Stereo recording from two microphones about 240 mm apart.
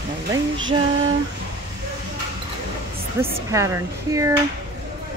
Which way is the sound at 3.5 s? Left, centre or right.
Centre.